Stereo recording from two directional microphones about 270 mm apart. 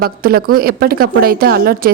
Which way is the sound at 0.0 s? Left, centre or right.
Right.